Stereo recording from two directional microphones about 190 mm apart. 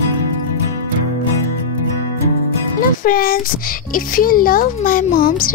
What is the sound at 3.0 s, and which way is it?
A child's voice, 50° left (ahead or behind).